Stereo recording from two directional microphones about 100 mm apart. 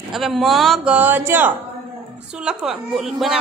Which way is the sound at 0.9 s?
20° right (ahead or behind).